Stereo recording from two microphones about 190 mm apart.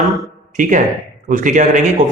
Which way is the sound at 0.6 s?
45° right (ahead or behind).